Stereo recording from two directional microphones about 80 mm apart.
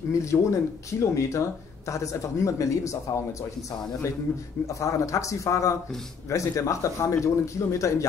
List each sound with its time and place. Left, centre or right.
0.1 s speech: left
4.7 s speech: left